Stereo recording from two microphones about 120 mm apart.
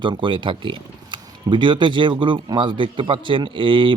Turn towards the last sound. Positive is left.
turn(degrees=-45)  # may be behind; listen again after turning